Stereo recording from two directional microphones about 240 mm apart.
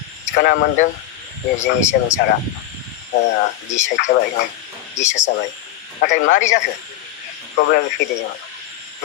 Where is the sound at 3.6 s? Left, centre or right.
Left.